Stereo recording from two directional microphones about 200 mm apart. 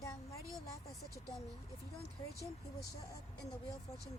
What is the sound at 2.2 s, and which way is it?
Speech, 25° left (ahead or behind).